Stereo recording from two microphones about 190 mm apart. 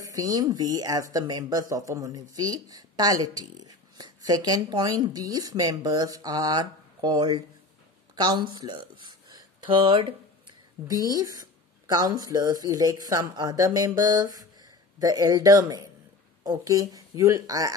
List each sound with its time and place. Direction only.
0.0 s speech: 20° right (ahead or behind)